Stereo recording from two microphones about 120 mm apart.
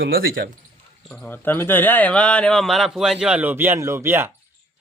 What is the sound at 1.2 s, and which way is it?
Speech, 15° left (ahead or behind).